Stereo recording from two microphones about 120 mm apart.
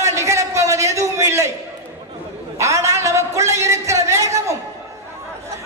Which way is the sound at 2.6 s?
25° right (ahead or behind).